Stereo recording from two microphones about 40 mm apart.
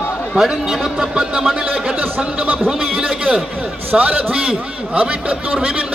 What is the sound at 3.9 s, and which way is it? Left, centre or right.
Speech, right.